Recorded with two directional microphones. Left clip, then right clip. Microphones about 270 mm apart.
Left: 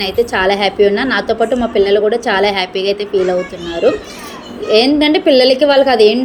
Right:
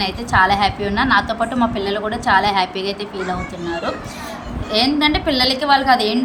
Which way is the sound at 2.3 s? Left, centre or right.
Centre.